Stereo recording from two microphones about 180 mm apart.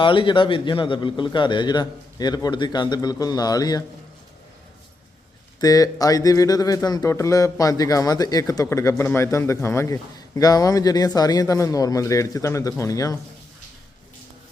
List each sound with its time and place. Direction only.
0.0 s speech: 30° left (ahead or behind)
5.5 s speech: 20° left (ahead or behind)